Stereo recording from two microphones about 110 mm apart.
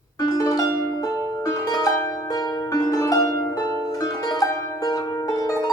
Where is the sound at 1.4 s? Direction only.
35° left (ahead or behind).